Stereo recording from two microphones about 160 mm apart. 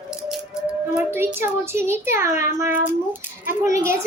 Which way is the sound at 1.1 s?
15° right (ahead or behind).